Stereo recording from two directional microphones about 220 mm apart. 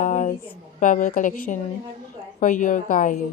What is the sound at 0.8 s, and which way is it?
A woman's voice, 35° left (ahead or behind).